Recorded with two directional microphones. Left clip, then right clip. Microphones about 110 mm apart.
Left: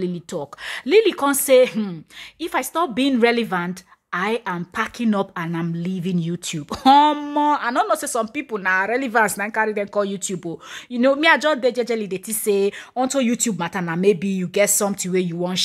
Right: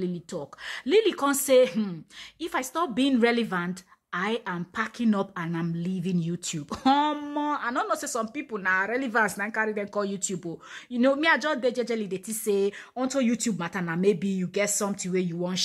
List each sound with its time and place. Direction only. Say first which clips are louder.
0.0 s a woman's voice: left 6 dB; 35° left (ahead or behind)